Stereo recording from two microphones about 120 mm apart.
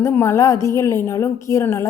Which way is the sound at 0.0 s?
20° left (ahead or behind).